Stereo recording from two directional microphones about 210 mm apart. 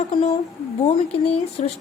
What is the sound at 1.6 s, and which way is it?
Speech, 35° left (ahead or behind).